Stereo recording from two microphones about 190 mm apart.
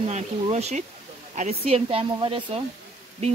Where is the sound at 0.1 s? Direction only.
35° right (ahead or behind).